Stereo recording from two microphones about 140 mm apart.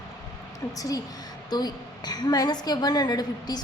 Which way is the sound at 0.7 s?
25° left (ahead or behind).